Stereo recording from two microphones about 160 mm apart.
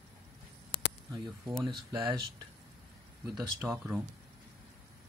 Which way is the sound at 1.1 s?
15° right (ahead or behind).